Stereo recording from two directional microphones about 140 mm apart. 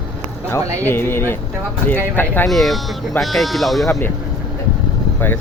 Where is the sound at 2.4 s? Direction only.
Centre (ahead or behind).